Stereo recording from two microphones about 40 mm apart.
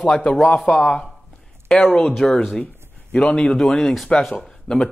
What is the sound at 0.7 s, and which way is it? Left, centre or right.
Speech, left.